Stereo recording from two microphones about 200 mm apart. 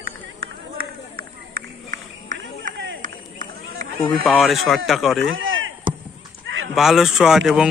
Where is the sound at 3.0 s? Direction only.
40° right (ahead or behind).